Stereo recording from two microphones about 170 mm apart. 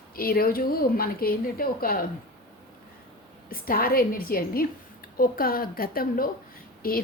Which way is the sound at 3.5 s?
60° left (ahead or behind).